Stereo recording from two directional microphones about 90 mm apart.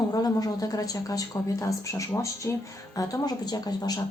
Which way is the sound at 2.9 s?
40° left (ahead or behind).